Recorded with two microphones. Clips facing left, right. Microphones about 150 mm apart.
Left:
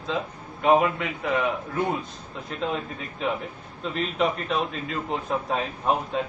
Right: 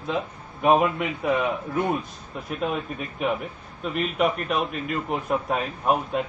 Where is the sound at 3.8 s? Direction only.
10° right (ahead or behind).